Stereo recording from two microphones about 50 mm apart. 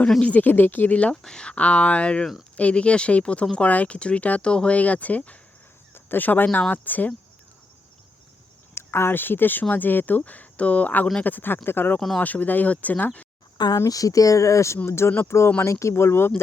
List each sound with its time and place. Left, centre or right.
0.2 s speech: left
1.1 s speech: centre
4.8 s speech: left
5.9 s speech: left
8.7 s speech: left
11.9 s speech: centre
12.2 s speech: left
14.3 s speech: left
14.8 s speech: left